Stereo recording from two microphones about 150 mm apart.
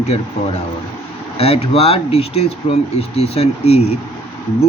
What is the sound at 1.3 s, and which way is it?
Speech, 40° left (ahead or behind).